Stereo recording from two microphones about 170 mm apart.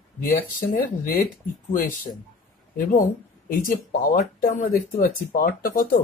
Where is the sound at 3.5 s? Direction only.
55° left (ahead or behind).